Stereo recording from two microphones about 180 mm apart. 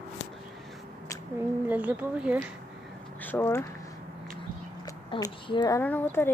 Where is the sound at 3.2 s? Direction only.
10° left (ahead or behind).